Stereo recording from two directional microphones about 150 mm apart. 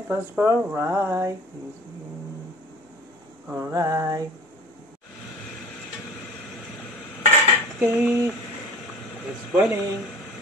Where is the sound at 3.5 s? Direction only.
20° right (ahead or behind).